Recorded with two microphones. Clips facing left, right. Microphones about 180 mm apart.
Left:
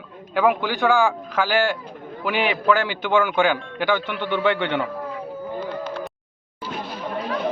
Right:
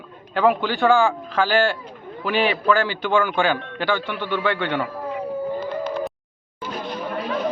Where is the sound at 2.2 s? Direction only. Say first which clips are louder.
Right 1 dB; 15° left (ahead or behind).